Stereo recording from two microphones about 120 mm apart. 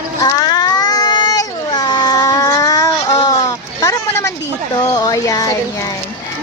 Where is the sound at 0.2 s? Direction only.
35° left (ahead or behind).